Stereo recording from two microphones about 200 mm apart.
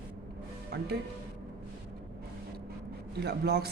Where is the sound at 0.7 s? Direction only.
55° right (ahead or behind).